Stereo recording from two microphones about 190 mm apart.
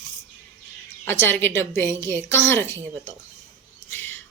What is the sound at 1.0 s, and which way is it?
A woman's voice, 10° left (ahead or behind).